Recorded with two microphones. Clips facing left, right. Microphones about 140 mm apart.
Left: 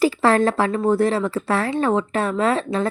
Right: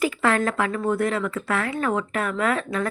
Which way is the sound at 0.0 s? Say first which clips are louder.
Left 5 dB; 35° left (ahead or behind).